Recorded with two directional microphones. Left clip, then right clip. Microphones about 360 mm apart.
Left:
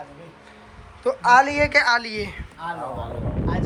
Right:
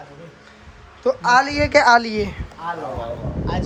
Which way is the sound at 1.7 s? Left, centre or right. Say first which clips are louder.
Right 5 dB; centre.